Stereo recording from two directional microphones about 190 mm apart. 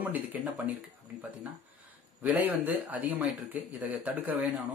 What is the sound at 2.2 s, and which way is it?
Speech, 10° right (ahead or behind).